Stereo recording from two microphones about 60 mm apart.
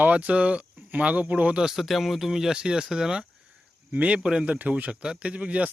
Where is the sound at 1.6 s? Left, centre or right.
Centre.